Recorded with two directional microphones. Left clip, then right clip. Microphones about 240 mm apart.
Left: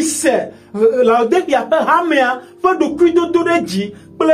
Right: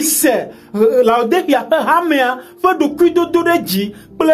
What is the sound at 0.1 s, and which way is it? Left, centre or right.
Speech, right.